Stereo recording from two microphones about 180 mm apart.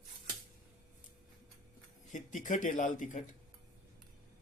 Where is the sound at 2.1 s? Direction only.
45° left (ahead or behind).